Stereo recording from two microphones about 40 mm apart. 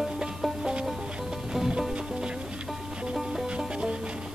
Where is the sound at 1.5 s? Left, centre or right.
Centre.